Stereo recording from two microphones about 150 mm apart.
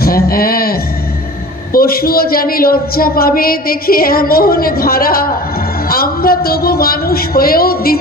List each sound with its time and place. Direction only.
0.0 s a man's voice: 90° left